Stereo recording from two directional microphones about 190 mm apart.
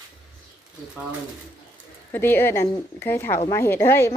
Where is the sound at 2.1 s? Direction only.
10° left (ahead or behind).